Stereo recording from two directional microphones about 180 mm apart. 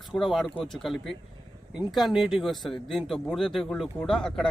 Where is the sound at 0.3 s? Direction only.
Centre (ahead or behind).